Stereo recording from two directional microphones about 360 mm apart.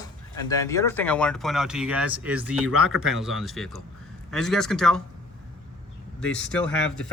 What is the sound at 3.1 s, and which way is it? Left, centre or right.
Speech, centre.